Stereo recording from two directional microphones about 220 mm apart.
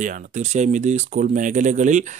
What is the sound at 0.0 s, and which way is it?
Speech, 35° right (ahead or behind).